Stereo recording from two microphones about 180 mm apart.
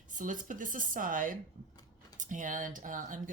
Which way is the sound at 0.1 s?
45° right (ahead or behind).